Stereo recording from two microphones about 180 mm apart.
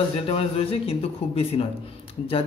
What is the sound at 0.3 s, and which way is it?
Speech, 30° left (ahead or behind).